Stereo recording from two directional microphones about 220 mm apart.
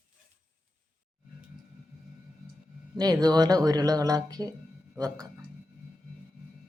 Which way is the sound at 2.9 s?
15° right (ahead or behind).